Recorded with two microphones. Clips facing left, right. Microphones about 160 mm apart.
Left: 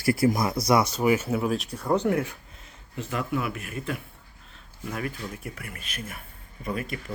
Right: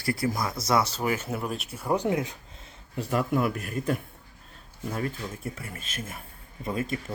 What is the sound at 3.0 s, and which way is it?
Speech, 40° right (ahead or behind).